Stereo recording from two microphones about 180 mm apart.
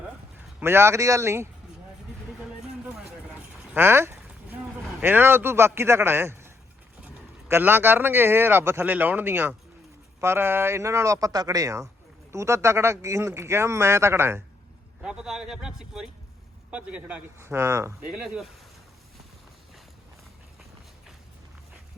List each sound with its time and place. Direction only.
0.6 s speech: 15° right (ahead or behind)
3.8 s speech: 15° right (ahead or behind)
18.1 s speech: 5° right (ahead or behind)